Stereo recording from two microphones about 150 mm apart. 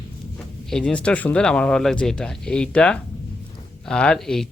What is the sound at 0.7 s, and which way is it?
Speech, 5° left (ahead or behind).